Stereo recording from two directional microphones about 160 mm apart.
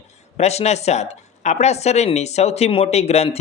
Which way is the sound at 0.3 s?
40° left (ahead or behind).